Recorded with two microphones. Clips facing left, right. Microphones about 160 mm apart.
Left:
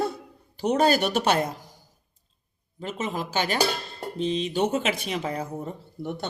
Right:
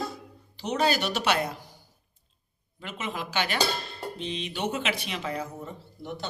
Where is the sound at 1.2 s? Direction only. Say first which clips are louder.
Left 3 dB; 35° left (ahead or behind).